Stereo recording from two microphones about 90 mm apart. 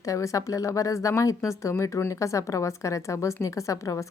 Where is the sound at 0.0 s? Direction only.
35° left (ahead or behind).